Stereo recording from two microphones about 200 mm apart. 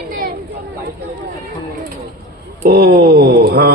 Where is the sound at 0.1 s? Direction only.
50° right (ahead or behind).